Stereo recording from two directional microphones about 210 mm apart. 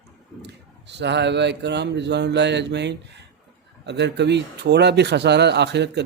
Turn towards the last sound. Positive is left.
turn(degrees=-55)  # may be behind; listen again after turning